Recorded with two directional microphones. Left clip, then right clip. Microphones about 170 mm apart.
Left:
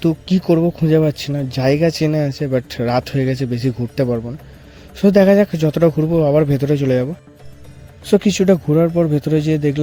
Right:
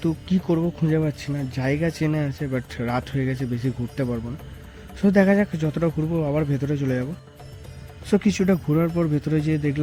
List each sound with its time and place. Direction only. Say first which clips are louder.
0.0 s speech: left 7 dB; 30° left (ahead or behind)